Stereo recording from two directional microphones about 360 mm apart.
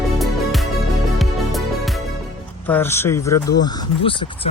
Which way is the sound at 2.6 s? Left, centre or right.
Centre.